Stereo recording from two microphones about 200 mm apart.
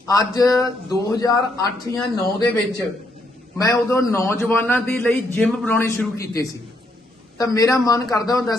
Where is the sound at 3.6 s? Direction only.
15° left (ahead or behind).